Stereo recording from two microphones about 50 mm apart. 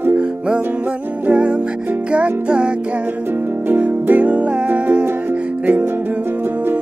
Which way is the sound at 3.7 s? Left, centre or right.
Right.